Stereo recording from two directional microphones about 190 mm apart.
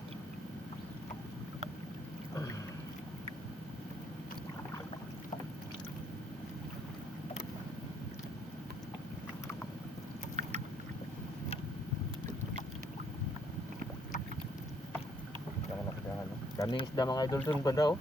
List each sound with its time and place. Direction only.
10.4 s boat: 35° right (ahead or behind)
16.6 s speech: 20° left (ahead or behind)